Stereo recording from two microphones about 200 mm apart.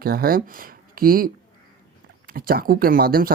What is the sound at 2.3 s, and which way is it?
Speech, 45° right (ahead or behind).